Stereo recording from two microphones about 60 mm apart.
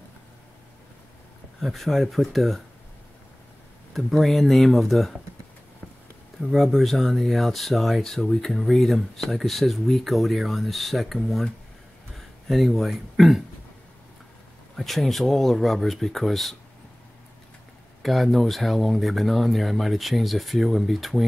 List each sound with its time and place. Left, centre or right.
1.6 s speech: centre
3.9 s speech: centre
6.4 s speech: centre
12.4 s speech: centre
14.8 s speech: centre
18.0 s speech: centre